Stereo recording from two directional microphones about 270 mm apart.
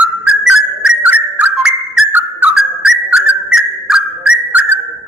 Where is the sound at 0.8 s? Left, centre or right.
Centre.